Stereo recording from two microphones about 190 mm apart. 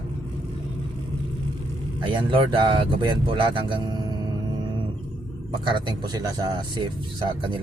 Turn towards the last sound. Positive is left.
turn(degrees=-25)  # may be behind; listen again after turning